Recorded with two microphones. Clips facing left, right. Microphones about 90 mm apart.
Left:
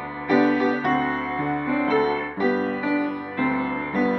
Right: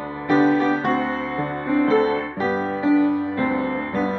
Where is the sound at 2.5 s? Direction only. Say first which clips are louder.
Right 3 dB; 30° right (ahead or behind).